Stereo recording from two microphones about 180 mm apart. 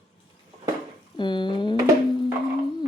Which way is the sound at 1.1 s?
25° left (ahead or behind).